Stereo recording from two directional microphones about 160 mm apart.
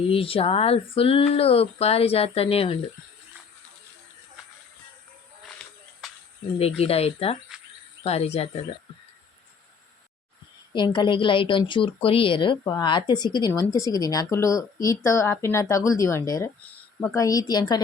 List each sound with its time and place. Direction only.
0.1 s speech: 35° left (ahead or behind)
5.6 s a sound: 5° left (ahead or behind)
6.0 s cricket: centre (ahead or behind)
6.6 s speech: 40° left (ahead or behind)
10.8 s a woman's voice: 30° left (ahead or behind)